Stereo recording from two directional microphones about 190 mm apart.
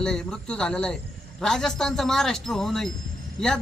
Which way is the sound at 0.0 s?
5° left (ahead or behind).